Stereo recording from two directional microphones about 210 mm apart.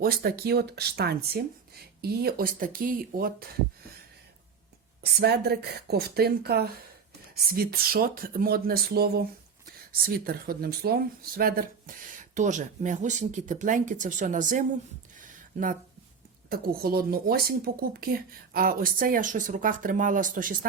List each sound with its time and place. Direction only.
0.0 s speech: 45° right (ahead or behind)
5.2 s speech: 50° right (ahead or behind)
16.5 s speech: 45° right (ahead or behind)